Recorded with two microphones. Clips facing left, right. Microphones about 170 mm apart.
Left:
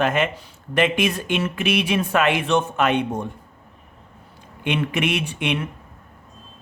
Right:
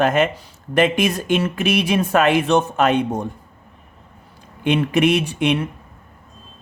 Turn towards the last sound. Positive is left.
turn(degrees=-35)  # may be behind; listen again after turning